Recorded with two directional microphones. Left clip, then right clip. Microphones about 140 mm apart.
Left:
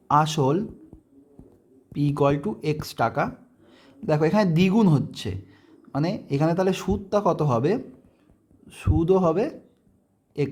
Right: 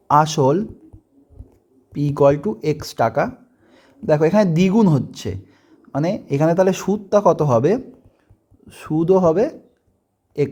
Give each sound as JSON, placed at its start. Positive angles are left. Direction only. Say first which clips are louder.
{"t": 0.1, "sound": "speech", "louder": "right 6 dB", "side_deg": -25}
{"t": 1.9, "sound": "speech", "louder": "right 7 dB", "side_deg": -25}